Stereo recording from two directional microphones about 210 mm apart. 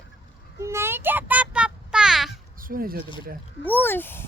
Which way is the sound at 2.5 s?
40° right (ahead or behind).